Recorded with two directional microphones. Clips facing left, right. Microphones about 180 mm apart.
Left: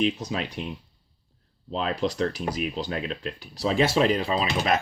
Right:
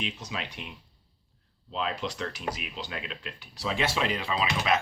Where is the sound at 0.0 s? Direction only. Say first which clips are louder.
Left 10 dB; 40° left (ahead or behind).